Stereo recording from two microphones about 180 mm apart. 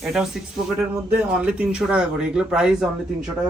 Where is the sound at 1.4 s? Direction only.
5° right (ahead or behind).